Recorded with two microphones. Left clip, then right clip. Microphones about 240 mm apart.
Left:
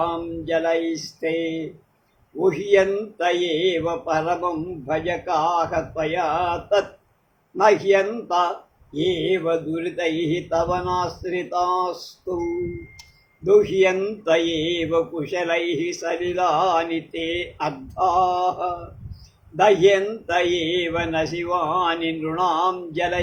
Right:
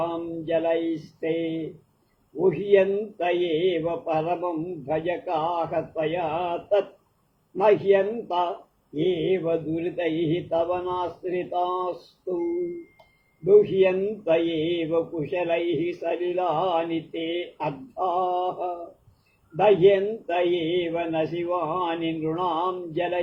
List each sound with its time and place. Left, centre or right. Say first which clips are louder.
0.0 s speech: left 4 dB; left
13.4 s speech: left 2 dB; left